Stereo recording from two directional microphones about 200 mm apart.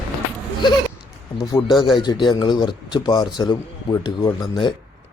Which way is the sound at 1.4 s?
20° left (ahead or behind).